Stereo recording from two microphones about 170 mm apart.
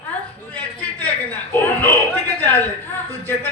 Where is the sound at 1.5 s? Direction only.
10° left (ahead or behind).